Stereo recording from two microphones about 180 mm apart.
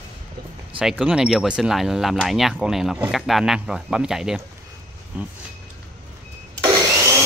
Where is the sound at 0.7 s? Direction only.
5° right (ahead or behind).